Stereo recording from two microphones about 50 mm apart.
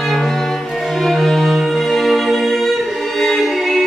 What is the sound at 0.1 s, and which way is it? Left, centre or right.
Cello, centre.